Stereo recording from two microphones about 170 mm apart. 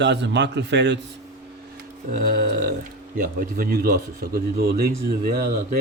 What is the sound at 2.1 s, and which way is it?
A man's voice, 55° right (ahead or behind).